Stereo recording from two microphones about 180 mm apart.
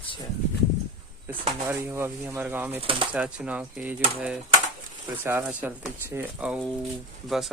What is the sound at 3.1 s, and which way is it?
Speech, 5° right (ahead or behind).